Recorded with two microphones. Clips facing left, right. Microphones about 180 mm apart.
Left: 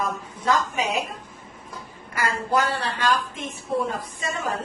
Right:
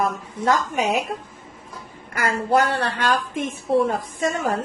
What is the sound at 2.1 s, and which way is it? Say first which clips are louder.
A woman's voice: right 4 dB; 60° right (ahead or behind).